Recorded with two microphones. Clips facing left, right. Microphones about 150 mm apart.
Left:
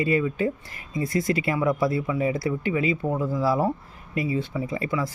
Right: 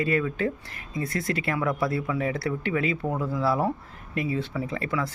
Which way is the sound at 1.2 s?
55° right (ahead or behind).